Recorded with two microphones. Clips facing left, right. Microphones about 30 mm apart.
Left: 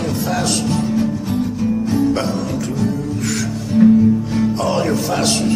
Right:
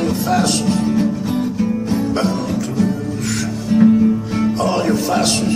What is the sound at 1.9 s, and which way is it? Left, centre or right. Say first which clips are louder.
Music: left 1 dB; centre.